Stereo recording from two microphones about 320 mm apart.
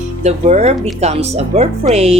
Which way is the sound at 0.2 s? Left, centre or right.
Right.